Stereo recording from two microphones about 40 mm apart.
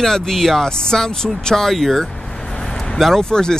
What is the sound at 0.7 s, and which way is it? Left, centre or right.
Speech, centre.